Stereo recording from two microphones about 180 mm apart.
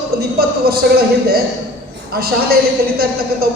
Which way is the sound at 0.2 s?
60° right (ahead or behind).